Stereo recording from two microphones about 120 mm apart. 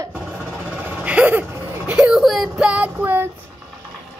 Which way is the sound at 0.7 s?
10° right (ahead or behind).